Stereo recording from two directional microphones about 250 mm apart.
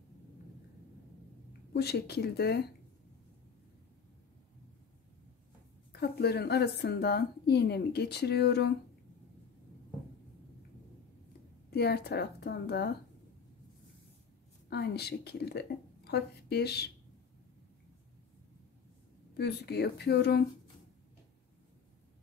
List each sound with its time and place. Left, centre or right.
1.7 s a woman's voice: left
5.9 s a woman's voice: left
11.7 s a woman's voice: left
14.7 s a woman's voice: left
19.3 s a woman's voice: left